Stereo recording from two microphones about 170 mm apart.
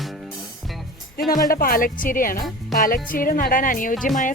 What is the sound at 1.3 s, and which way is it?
Speech, 55° left (ahead or behind).